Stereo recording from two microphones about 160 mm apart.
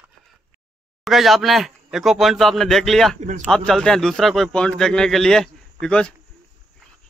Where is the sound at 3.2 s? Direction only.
50° right (ahead or behind).